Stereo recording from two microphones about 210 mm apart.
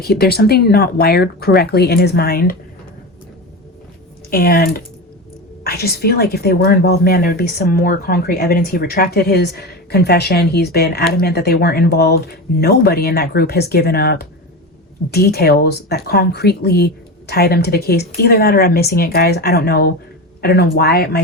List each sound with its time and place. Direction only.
0.0 s speech: 50° left (ahead or behind)
4.3 s speech: 45° left (ahead or behind)